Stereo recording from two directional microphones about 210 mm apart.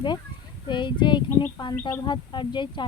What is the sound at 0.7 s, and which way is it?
Speech, 20° left (ahead or behind).